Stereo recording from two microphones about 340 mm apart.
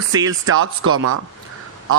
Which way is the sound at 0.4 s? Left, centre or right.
Right.